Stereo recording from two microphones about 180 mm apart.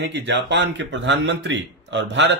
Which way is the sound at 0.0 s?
75° right (ahead or behind).